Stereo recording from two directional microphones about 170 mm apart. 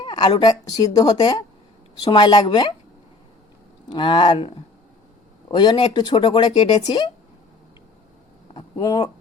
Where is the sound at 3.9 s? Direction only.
30° left (ahead or behind).